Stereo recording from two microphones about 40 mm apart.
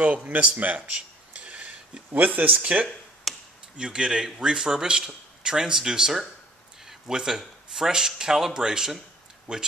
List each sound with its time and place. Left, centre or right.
0.3 s speech: right
1.3 s a sound: right
2.6 s speech: right
3.3 s tick-tock: centre
3.7 s a man's voice: right
9.5 s speech: right